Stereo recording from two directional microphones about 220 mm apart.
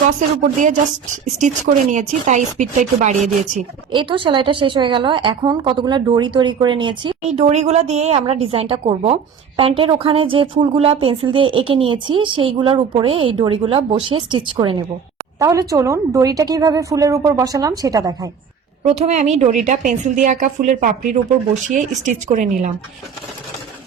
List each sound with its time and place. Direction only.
1.2 s a woman's voice: 35° right (ahead or behind)
3.9 s a woman's voice: 25° right (ahead or behind)
18.9 s a woman's voice: 30° right (ahead or behind)